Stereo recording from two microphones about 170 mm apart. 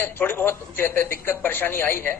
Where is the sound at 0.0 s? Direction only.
10° left (ahead or behind).